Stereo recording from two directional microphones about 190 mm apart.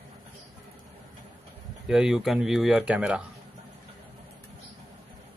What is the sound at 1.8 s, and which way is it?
Speech, centre (ahead or behind).